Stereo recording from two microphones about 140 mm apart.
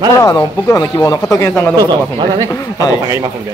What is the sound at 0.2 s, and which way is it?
Speech, 20° left (ahead or behind).